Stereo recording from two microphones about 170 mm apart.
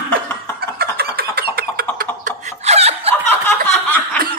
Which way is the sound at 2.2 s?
40° right (ahead or behind).